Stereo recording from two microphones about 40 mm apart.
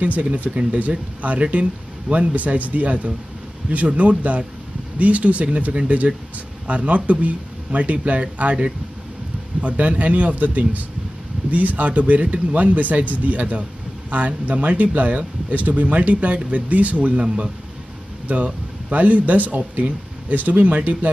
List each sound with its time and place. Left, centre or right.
0.0 s speech: right